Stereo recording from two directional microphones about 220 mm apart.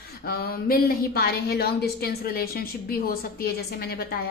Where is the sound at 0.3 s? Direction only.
45° left (ahead or behind).